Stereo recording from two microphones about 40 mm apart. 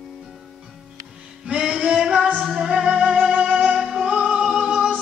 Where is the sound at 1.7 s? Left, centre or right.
Centre.